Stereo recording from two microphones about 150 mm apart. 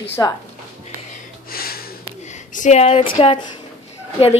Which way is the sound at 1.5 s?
85° left.